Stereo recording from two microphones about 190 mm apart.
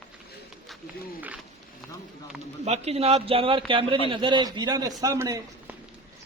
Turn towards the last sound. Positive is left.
turn(degrees=-15)  # may be behind; listen again after turning